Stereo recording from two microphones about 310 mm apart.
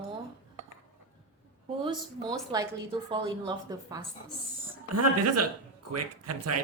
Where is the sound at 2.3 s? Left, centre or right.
Centre.